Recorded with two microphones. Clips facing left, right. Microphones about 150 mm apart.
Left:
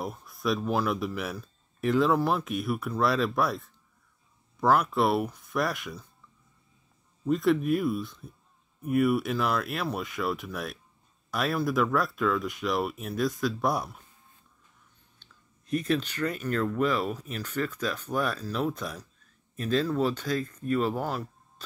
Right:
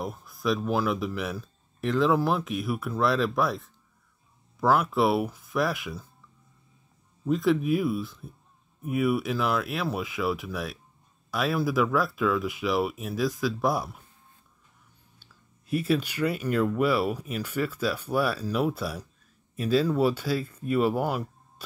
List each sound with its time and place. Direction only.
0.0 s speech: centre (ahead or behind)
7.2 s speech: centre (ahead or behind)
15.1 s speech: 5° right (ahead or behind)